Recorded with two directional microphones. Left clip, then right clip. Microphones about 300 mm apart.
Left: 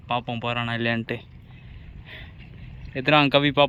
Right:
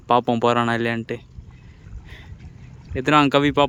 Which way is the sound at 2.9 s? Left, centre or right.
Centre.